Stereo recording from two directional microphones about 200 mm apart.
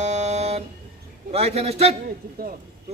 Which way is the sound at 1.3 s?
30° right (ahead or behind).